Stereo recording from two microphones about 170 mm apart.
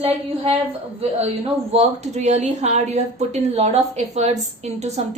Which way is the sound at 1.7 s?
40° right (ahead or behind).